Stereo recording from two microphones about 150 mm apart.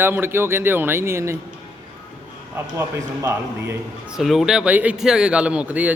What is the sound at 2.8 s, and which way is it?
Speech, 20° right (ahead or behind).